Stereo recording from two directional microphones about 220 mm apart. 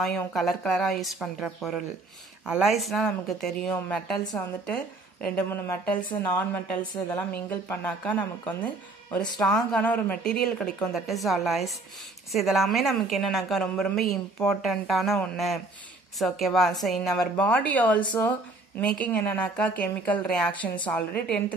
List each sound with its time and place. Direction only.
0.0 s a woman's voice: 5° left (ahead or behind)
4.2 s a woman's voice: 20° left (ahead or behind)
4.6 s a woman's voice: 5° left (ahead or behind)
6.8 s a woman's voice: 20° left (ahead or behind)
7.2 s a woman's voice: 10° left (ahead or behind)